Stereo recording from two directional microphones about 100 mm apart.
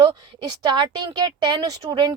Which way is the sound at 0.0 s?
45° right (ahead or behind).